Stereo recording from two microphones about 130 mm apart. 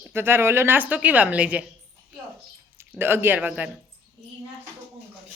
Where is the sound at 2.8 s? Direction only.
15° right (ahead or behind).